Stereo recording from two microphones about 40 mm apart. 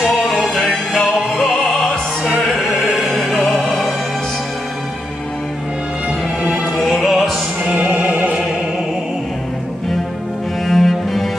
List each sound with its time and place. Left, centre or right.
0.0 s music: centre
6.4 s music: centre
6.8 s music: centre
7.7 s music: right
10.7 s cello: centre